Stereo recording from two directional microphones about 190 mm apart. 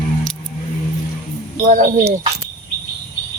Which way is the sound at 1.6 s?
45° right (ahead or behind).